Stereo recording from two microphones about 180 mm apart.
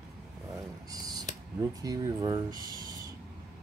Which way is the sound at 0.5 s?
20° right (ahead or behind).